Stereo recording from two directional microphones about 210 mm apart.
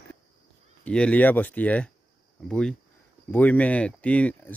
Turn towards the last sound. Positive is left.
turn(degrees=5)  # may be behind; listen again after turning